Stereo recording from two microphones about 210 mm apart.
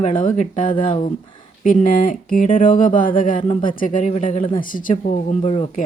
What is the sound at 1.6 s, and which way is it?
Speech, 40° left (ahead or behind).